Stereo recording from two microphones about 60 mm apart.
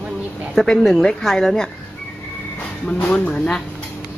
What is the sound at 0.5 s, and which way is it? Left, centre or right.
Speech, centre.